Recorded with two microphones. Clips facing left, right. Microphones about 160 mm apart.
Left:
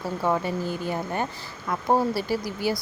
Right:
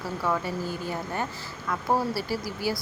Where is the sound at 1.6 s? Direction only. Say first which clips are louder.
Left 3 dB; 20° left (ahead or behind).